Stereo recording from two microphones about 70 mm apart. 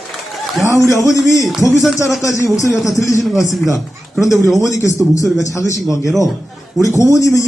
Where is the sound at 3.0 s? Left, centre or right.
Left.